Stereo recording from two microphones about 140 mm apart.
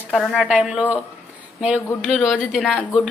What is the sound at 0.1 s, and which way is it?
Speech, 5° right (ahead or behind).